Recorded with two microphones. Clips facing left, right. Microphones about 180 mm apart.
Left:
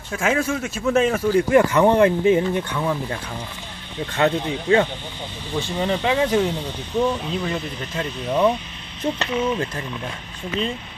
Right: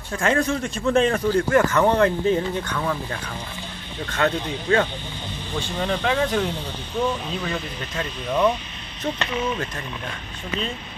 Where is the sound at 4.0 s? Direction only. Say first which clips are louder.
Left 3 dB; 15° left (ahead or behind).